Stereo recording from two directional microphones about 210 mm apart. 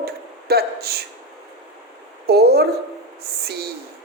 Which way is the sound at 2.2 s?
50° right (ahead or behind).